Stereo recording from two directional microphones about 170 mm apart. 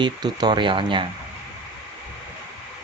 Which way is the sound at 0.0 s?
25° right (ahead or behind).